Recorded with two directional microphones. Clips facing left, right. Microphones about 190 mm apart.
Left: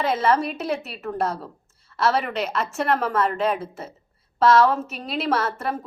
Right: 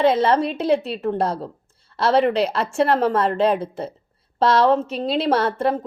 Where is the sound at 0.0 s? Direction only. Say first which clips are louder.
Right 4 dB; 30° right (ahead or behind).